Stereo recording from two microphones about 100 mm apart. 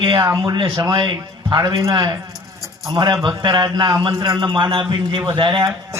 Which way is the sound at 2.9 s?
50° right (ahead or behind).